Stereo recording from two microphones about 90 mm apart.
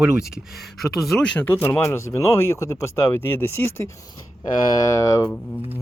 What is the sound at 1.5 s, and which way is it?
Speech, 35° left (ahead or behind).